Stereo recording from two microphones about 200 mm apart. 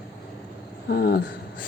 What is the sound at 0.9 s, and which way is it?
Speech, 50° left (ahead or behind).